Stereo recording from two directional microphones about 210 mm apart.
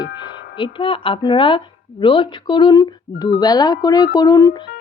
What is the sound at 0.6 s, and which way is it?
A woman's voice, 25° left (ahead or behind).